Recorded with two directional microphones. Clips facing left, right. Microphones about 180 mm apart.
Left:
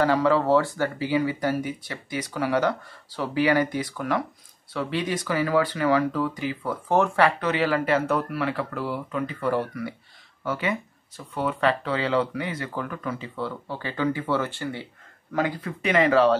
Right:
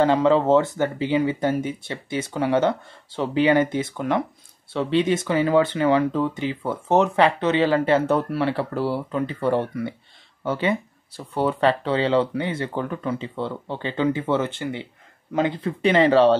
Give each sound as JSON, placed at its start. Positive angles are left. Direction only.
{"t": 0.0, "sound": "speech", "side_deg": -25}